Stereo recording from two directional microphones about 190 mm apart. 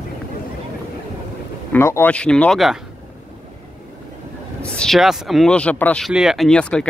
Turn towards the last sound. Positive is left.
turn(degrees=5)  # may be behind; listen again after turning